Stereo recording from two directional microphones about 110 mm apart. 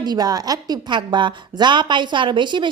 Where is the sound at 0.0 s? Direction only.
40° right (ahead or behind).